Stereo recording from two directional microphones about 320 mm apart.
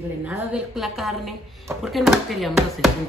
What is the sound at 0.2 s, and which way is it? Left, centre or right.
A woman's voice, centre.